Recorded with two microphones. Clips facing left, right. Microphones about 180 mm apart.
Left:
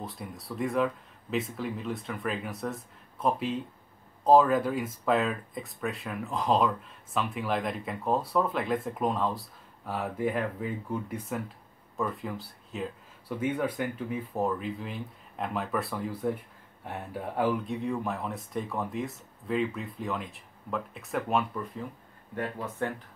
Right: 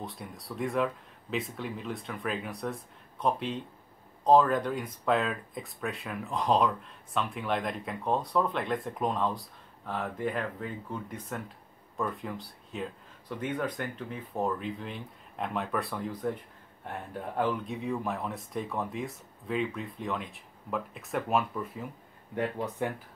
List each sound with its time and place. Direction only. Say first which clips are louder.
0.0 s speech: left 1 dB; centre (ahead or behind)
22.3 s speech: right 2 dB; 15° right (ahead or behind)